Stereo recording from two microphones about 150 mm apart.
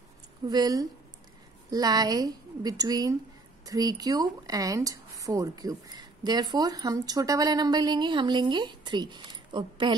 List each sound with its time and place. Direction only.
0.5 s speech: 25° right (ahead or behind)